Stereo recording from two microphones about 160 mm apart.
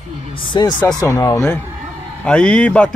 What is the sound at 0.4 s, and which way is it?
Speech, 30° left (ahead or behind).